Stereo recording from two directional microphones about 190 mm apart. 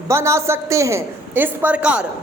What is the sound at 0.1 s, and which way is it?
A woman's voice, 15° right (ahead or behind).